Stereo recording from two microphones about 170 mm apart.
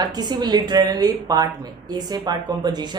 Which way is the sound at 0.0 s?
25° right (ahead or behind).